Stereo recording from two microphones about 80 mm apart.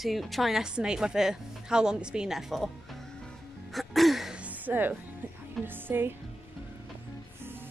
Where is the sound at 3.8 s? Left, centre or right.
Centre.